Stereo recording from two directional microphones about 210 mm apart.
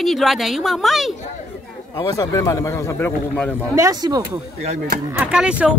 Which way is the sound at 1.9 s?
15° left (ahead or behind).